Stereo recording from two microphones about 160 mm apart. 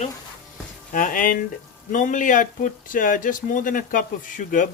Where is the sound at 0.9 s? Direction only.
60° left (ahead or behind).